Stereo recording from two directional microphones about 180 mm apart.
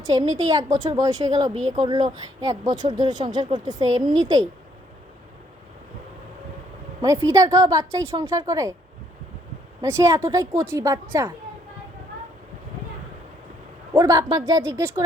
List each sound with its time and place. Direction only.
0.0 s speech: 20° right (ahead or behind)
7.0 s a woman's voice: 15° right (ahead or behind)
9.8 s a woman's voice: 15° right (ahead or behind)
13.9 s speech: 20° right (ahead or behind)